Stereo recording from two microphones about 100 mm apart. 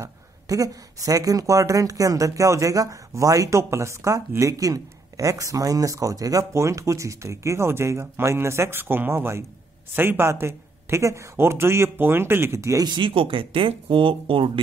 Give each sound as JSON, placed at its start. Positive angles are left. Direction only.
{"t": 0.0, "sound": "speech", "side_deg": -35}
{"t": 12.8, "sound": "speech", "side_deg": -50}